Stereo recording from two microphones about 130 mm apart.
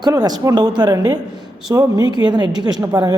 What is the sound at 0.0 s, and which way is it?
A woman's voice, 30° right (ahead or behind).